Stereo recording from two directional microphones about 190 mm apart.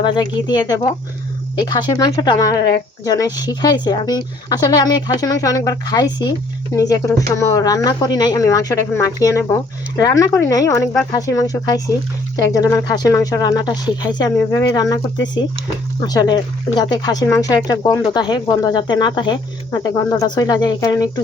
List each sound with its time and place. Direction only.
0.0 s speech: 25° left (ahead or behind)